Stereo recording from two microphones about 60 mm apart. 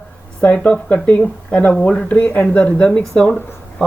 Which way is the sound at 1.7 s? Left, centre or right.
Centre.